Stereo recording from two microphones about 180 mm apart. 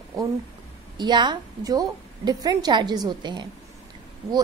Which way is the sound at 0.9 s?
25° right (ahead or behind).